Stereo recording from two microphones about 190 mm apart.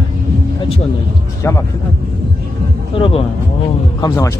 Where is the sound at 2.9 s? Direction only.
30° left (ahead or behind).